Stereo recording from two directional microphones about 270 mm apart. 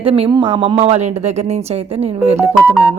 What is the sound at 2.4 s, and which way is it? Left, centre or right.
Speech, centre.